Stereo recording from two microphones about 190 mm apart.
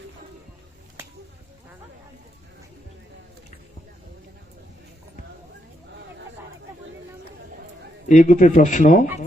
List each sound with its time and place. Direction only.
8.0 s speech: 40° left (ahead or behind)